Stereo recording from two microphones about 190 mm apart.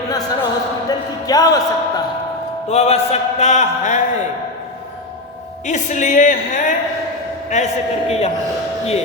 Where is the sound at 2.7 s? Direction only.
35° left (ahead or behind).